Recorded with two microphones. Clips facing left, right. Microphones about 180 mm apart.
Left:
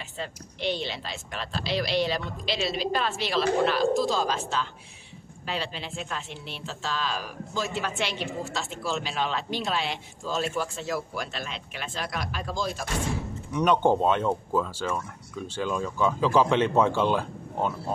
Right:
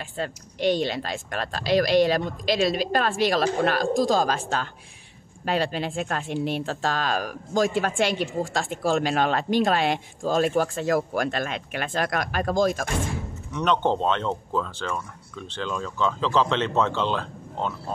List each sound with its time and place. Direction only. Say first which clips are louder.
0.2 s a woman's voice: right 7 dB; 45° right (ahead or behind)
13.5 s speech: left 1 dB; 10° left (ahead or behind)